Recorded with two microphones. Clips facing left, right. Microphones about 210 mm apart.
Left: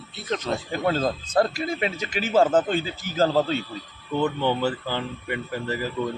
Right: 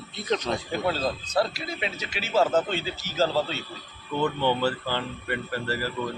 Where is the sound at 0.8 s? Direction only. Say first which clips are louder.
Left 5 dB; 50° left (ahead or behind).